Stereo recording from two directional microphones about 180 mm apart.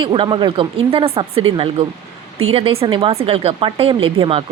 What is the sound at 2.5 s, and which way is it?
Speech, 30° right (ahead or behind).